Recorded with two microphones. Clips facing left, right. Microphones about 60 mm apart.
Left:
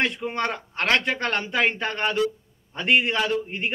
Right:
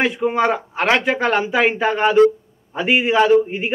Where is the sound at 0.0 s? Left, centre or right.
Centre.